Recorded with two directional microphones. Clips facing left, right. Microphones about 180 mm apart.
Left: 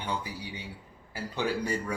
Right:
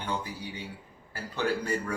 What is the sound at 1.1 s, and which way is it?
Speech, 15° left (ahead or behind).